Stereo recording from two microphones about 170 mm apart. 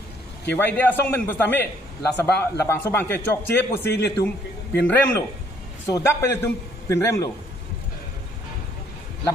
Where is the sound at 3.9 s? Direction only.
75° left (ahead or behind).